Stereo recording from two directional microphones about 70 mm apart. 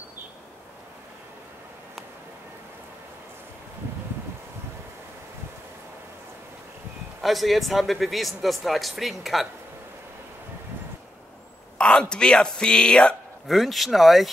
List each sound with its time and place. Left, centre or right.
7.2 s speech: centre
11.8 s speech: centre
13.5 s speech: centre